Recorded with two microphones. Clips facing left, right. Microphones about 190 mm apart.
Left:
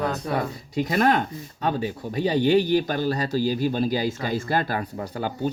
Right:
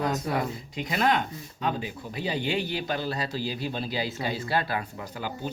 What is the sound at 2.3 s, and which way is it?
Speech, 40° left (ahead or behind).